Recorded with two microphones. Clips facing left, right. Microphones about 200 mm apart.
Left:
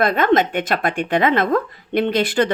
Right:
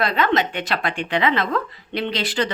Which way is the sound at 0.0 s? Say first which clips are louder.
Left 4 dB; 50° left (ahead or behind).